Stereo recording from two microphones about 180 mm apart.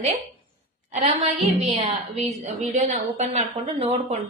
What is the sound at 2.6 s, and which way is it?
A woman's voice, 40° right (ahead or behind).